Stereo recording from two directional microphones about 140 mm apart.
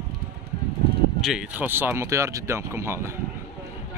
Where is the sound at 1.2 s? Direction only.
5° right (ahead or behind).